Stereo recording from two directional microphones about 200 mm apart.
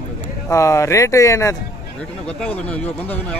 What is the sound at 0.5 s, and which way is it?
A man's voice, 15° left (ahead or behind).